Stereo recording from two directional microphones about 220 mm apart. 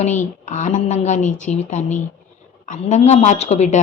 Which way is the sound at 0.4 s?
35° left (ahead or behind).